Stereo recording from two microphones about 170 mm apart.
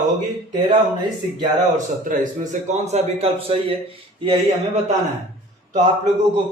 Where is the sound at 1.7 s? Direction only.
50° right (ahead or behind).